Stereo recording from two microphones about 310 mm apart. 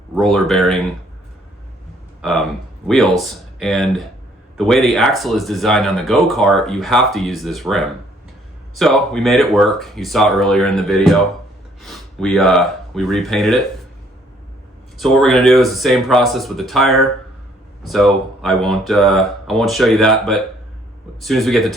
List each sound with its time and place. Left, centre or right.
0.2 s speech: centre
2.2 s speech: centre
14.9 s speech: centre